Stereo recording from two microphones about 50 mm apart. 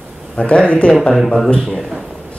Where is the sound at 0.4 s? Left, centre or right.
Left.